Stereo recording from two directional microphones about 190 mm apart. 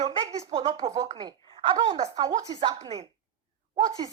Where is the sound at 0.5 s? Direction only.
30° right (ahead or behind).